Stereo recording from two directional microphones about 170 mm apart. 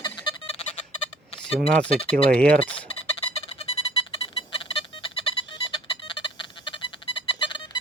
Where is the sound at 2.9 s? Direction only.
35° left (ahead or behind).